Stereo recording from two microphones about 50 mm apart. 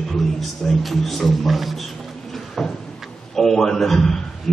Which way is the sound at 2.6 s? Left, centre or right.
Centre.